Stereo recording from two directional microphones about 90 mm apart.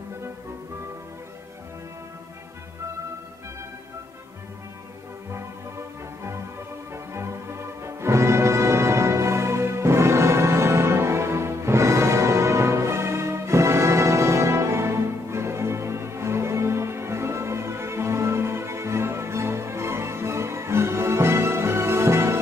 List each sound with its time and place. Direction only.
5.3 s music: 30° right (ahead or behind)